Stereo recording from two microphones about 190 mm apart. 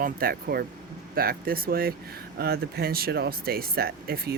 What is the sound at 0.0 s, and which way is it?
Speech, 50° right (ahead or behind).